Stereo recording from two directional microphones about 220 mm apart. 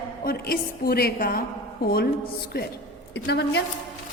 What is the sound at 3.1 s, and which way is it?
Speech, 50° left (ahead or behind).